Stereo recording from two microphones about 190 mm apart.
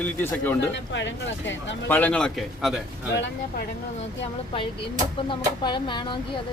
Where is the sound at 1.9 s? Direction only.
10° left (ahead or behind).